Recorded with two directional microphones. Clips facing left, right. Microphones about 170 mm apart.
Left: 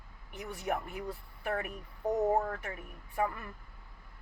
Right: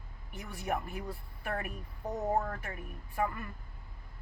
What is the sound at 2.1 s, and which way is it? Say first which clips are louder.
Speech: left 2 dB; 20° left (ahead or behind).